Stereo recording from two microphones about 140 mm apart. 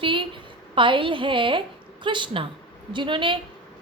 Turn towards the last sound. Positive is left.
turn(degrees=-35)  # may be behind; listen again after turning